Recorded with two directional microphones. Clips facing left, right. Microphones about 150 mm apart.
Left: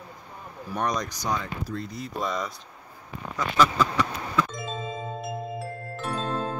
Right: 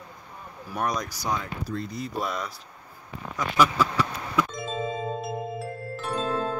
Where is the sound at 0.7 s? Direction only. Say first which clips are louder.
Left 1 dB; 5° right (ahead or behind).